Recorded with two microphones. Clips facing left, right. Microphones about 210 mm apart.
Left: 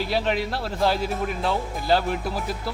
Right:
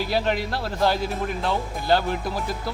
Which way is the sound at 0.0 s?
Centre (ahead or behind).